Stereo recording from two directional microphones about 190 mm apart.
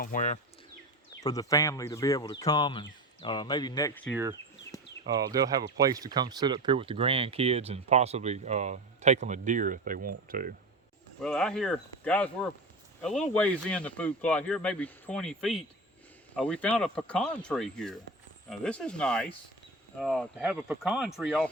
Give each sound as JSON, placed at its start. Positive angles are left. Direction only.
{"t": 0.0, "sound": "speech", "side_deg": 45}
{"t": 1.2, "sound": "speech", "side_deg": 20}
{"t": 4.1, "sound": "speech", "side_deg": -15}
{"t": 11.2, "sound": "speech", "side_deg": 5}